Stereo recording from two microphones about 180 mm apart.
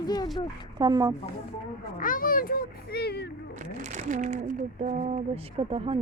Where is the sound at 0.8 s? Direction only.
20° right (ahead or behind).